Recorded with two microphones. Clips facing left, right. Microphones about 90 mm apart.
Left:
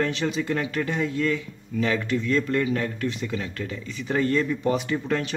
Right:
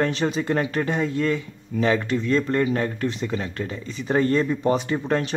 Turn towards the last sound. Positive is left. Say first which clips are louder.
# right 2 dB
turn(degrees=-35)  # may be behind; listen again after turning